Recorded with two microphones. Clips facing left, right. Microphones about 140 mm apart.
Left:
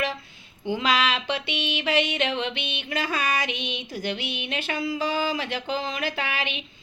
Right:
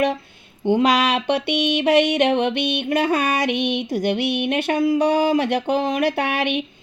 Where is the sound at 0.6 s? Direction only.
60° right (ahead or behind).